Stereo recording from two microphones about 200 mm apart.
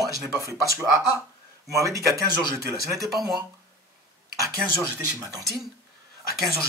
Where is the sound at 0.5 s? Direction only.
15° right (ahead or behind).